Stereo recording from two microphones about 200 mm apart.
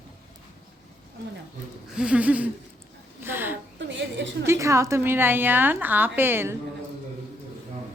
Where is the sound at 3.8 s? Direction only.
65° right (ahead or behind).